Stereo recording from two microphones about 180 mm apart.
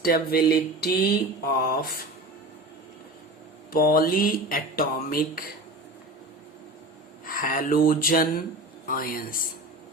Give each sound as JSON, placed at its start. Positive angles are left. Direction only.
{"t": 0.0, "sound": "speech", "side_deg": 55}
{"t": 3.7, "sound": "speech", "side_deg": 55}
{"t": 7.3, "sound": "speech", "side_deg": 50}